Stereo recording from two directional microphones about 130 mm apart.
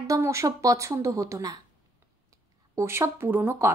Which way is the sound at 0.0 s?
25° right (ahead or behind).